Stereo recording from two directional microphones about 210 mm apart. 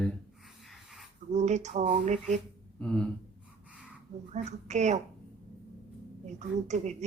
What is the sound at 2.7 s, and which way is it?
Speech, 5° left (ahead or behind).